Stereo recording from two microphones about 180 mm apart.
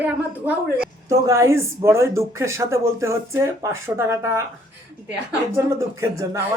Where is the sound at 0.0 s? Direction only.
10° right (ahead or behind).